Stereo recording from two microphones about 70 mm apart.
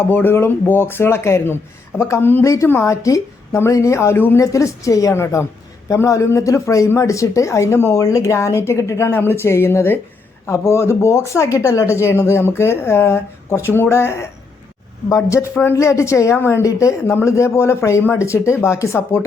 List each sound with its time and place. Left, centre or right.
0.1 s a woman's voice: left
5.1 s a woman's voice: left